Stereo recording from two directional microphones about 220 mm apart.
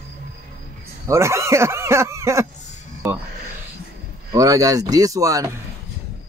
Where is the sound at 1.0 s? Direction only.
15° right (ahead or behind).